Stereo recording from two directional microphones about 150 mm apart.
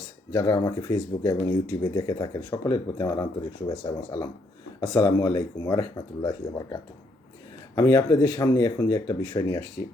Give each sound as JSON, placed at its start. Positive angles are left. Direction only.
{"t": 0.3, "sound": "speech", "side_deg": 30}
{"t": 7.8, "sound": "speech", "side_deg": 25}